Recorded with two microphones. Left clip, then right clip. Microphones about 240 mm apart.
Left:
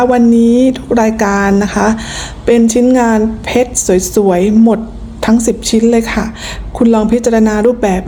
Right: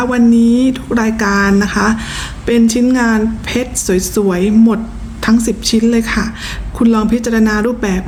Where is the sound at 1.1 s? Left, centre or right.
Right.